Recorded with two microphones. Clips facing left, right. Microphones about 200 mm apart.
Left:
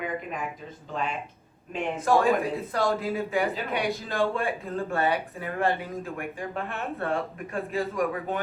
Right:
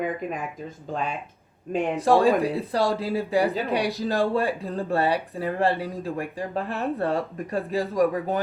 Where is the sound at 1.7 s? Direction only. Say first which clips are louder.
Right 4 dB; 30° right (ahead or behind).